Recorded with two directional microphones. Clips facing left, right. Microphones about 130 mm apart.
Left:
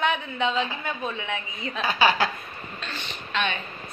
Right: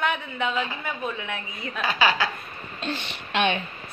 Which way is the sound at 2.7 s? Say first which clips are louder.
Right 7 dB; 55° right (ahead or behind).